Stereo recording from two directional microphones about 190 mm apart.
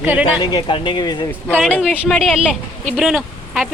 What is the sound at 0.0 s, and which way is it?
Speech, 10° right (ahead or behind).